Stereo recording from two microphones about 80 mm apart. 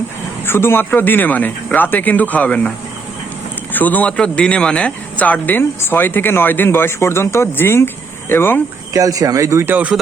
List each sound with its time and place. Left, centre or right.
0.4 s speech: left
8.9 s speech: right
9.6 s speech: right